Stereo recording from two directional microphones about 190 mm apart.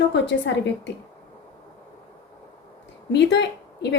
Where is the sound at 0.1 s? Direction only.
70° left (ahead or behind).